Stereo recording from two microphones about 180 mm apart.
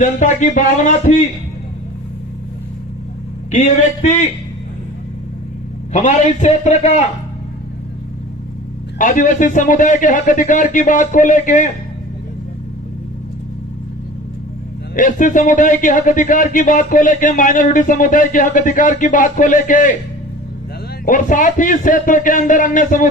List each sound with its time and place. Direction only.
0.0 s a man's voice: 45° left (ahead or behind)
3.5 s a man's voice: 45° left (ahead or behind)
5.9 s a man's voice: 40° left (ahead or behind)
9.0 s a man's voice: 45° left (ahead or behind)
14.9 s a man's voice: 45° left (ahead or behind)
21.0 s a man's voice: 50° left (ahead or behind)